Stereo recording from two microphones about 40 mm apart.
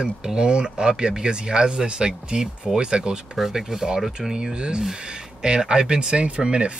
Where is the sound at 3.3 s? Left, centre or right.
Centre.